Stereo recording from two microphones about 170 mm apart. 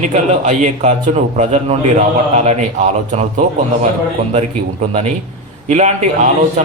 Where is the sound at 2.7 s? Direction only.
45° right (ahead or behind).